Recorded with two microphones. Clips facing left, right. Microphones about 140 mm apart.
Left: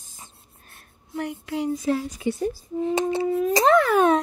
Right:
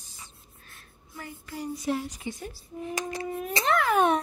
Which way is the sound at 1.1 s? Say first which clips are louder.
Left 11 dB; 70° left (ahead or behind).